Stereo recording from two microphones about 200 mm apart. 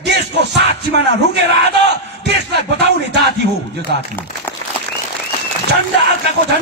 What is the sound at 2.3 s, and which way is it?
A man's voice, 60° right (ahead or behind).